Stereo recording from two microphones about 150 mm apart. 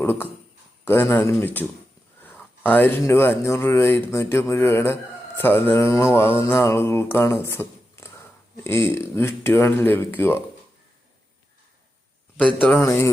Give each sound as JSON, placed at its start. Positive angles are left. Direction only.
{"t": 0.0, "sound": "speech", "side_deg": 15}
{"t": 12.5, "sound": "speech", "side_deg": 10}